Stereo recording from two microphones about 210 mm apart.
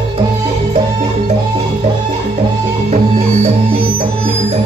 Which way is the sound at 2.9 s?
30° right (ahead or behind).